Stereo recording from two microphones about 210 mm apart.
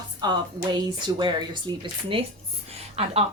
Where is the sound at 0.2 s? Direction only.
20° right (ahead or behind).